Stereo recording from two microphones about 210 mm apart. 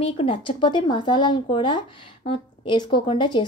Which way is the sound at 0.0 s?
25° left (ahead or behind).